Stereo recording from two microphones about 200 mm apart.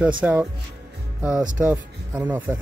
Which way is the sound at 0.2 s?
5° right (ahead or behind).